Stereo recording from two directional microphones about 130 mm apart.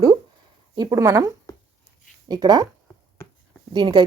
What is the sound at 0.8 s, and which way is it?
Speech, 25° right (ahead or behind).